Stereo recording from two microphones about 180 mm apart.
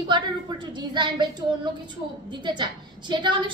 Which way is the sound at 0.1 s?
25° right (ahead or behind).